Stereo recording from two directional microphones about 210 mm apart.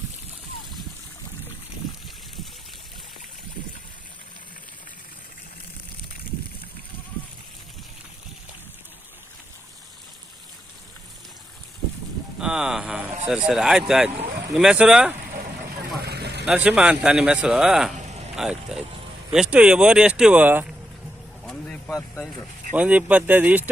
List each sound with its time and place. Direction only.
12.4 s a sound: 5° right (ahead or behind)
13.2 s a man's voice: 5° right (ahead or behind)
16.0 s vehicle: 50° right (ahead or behind)
16.5 s a man's voice: 5° right (ahead or behind)
21.4 s vehicle: 5° left (ahead or behind)
21.9 s a sound: 10° left (ahead or behind)
22.7 s speech: 5° right (ahead or behind)